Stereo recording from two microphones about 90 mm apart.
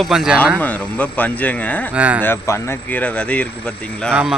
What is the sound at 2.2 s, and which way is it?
Speech, 30° left (ahead or behind).